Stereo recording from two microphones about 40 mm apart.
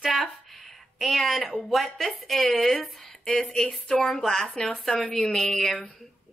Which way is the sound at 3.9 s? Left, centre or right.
Left.